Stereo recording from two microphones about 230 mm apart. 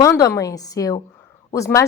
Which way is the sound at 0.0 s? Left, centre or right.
Centre.